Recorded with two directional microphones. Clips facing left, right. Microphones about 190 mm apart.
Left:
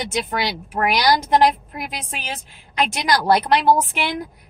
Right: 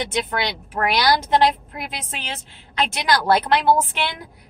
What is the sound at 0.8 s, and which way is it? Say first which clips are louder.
Speech: left 1 dB; 15° left (ahead or behind).